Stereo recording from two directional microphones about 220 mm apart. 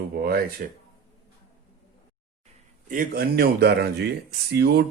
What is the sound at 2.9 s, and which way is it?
A man's voice, 40° right (ahead or behind).